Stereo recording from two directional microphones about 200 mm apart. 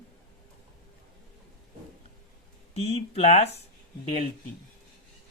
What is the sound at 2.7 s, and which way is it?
Speech, 30° left (ahead or behind).